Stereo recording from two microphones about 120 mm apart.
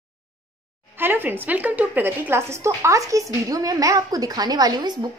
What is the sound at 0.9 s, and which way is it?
A woman's voice, 15° right (ahead or behind).